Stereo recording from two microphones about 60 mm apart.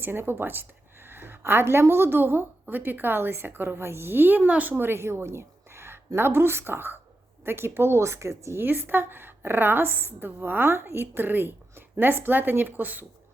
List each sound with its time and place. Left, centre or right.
0.0 s speech: right
4.7 s a woman's voice: right
8.6 s speech: right